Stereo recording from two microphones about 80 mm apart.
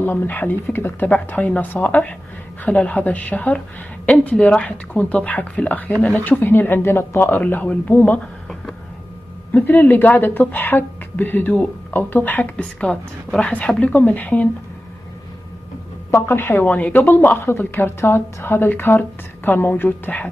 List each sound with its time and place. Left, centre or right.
0.0 s a woman's voice: left
9.5 s a woman's voice: left
16.1 s a woman's voice: left
16.6 s a woman's voice: centre